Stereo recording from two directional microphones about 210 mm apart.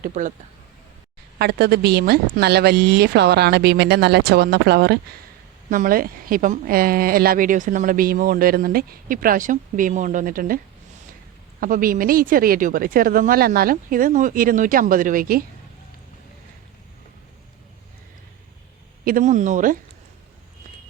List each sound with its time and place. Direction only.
0.0 s a woman's voice: 35° right (ahead or behind)
1.4 s a woman's voice: 50° right (ahead or behind)
11.6 s a woman's voice: 40° right (ahead or behind)
19.0 s a woman's voice: 40° right (ahead or behind)